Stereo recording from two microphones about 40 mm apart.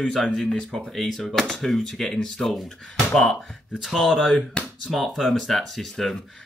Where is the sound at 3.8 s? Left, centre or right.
Centre.